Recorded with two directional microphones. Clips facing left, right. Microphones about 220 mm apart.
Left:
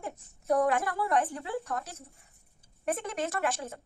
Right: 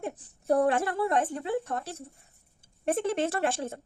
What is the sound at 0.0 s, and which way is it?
A woman's voice, 30° right (ahead or behind).